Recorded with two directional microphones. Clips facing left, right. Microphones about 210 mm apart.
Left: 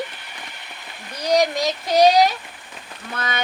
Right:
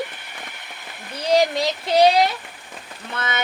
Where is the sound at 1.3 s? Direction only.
25° right (ahead or behind).